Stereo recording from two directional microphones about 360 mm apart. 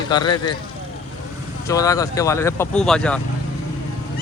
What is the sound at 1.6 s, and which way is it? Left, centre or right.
Speech, centre.